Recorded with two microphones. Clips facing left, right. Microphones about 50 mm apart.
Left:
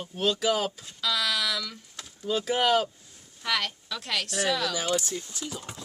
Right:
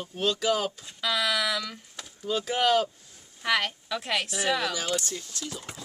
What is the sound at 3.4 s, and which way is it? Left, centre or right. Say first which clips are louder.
A woman's voice: right 3 dB; right.